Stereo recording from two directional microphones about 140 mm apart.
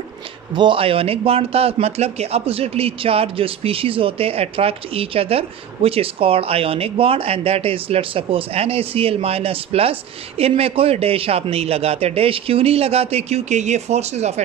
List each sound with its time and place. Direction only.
0.6 s a man's voice: 40° right (ahead or behind)